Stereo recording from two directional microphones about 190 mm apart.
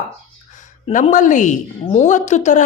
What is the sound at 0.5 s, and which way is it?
A woman's voice, 40° left (ahead or behind).